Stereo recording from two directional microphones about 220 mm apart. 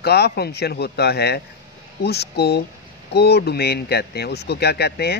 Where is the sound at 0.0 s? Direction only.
45° left (ahead or behind).